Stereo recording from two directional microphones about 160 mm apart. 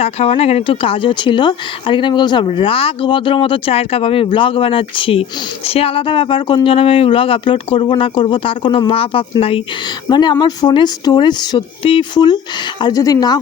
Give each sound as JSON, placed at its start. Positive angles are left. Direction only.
{"t": 0.0, "sound": "speech", "side_deg": 40}